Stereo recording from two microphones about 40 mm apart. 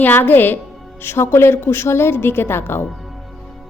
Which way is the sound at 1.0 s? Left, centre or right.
Left.